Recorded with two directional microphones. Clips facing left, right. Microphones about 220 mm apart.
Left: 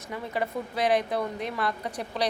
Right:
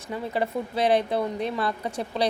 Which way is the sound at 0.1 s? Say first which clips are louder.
Right 3 dB; 30° right (ahead or behind).